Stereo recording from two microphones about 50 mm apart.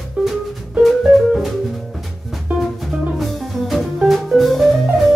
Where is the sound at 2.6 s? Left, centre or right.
Centre.